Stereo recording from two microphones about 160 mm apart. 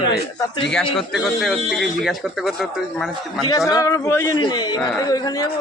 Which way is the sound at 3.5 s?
20° left (ahead or behind).